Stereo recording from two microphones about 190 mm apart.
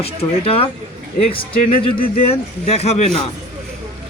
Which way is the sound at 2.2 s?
30° left (ahead or behind).